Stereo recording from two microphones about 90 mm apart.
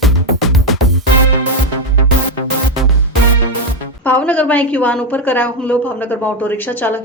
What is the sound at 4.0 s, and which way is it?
A woman's voice, 20° left (ahead or behind).